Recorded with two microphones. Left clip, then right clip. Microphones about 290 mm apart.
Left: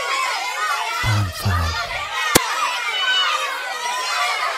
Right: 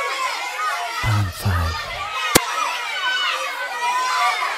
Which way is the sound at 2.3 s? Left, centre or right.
Centre.